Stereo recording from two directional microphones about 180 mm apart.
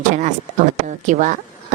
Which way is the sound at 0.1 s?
45° right (ahead or behind).